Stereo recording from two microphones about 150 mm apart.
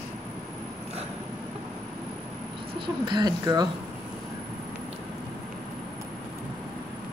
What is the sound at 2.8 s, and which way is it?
Speech, 30° right (ahead or behind).